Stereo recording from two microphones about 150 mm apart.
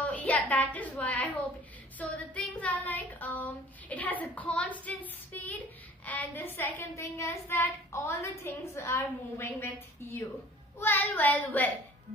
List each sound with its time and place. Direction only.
0.0 s a woman's voice: 10° left (ahead or behind)